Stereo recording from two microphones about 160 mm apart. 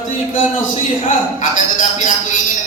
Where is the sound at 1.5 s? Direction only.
55° left (ahead or behind).